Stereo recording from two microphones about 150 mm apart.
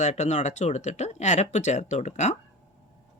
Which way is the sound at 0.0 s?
50° left (ahead or behind).